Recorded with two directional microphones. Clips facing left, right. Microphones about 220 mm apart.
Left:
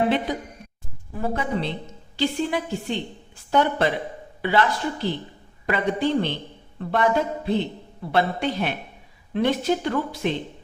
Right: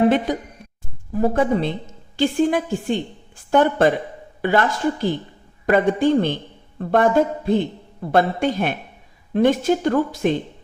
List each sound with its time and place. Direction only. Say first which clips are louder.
0.3 s a man's voice: right 4 dB; 45° right (ahead or behind)